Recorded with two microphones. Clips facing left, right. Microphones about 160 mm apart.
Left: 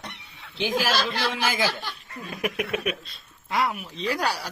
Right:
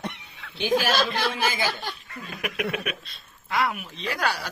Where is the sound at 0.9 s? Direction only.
50° right (ahead or behind).